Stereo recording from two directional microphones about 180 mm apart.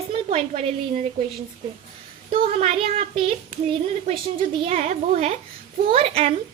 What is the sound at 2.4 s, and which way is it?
A woman's voice, 35° right (ahead or behind).